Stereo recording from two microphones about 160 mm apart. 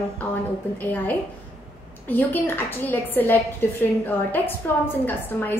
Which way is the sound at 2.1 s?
10° left (ahead or behind).